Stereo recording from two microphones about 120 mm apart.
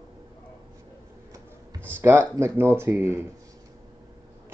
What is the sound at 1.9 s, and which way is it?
Speech, 20° right (ahead or behind).